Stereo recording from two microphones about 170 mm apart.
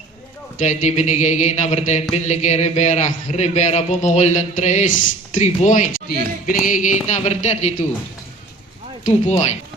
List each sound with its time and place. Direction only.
0.6 s a man's voice: 45° left (ahead or behind)
9.0 s speech: 40° left (ahead or behind)